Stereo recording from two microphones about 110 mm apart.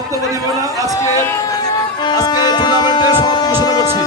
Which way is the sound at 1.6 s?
35° left (ahead or behind).